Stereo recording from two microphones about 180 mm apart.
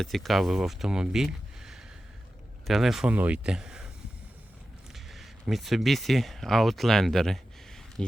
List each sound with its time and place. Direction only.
0.0 s speech: centre (ahead or behind)
5.0 s speech: centre (ahead or behind)